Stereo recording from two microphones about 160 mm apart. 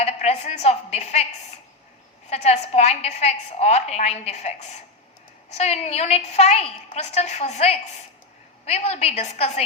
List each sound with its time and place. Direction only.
0.0 s a woman's voice: 40° left (ahead or behind)
2.3 s a woman's voice: 40° left (ahead or behind)